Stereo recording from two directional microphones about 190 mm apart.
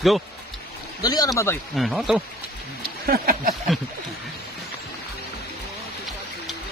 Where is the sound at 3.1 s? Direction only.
50° right (ahead or behind).